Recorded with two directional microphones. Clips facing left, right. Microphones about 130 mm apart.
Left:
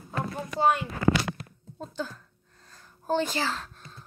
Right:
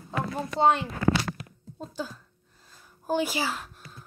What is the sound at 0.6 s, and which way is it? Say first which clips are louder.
Speech: right 2 dB; 25° right (ahead or behind).